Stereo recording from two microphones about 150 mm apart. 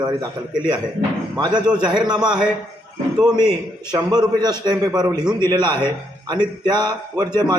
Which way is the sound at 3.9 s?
5° right (ahead or behind).